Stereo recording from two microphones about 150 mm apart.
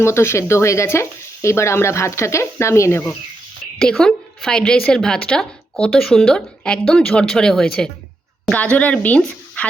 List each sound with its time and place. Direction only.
0.0 s speech: 15° left (ahead or behind)
3.8 s a woman's voice: 5° left (ahead or behind)